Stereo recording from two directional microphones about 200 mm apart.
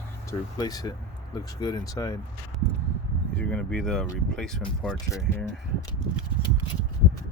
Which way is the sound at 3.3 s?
5° left (ahead or behind).